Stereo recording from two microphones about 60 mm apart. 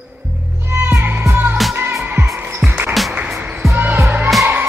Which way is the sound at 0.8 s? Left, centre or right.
Right.